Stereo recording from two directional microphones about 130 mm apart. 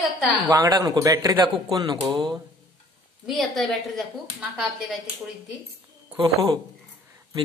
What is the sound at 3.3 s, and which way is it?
Speech, centre (ahead or behind).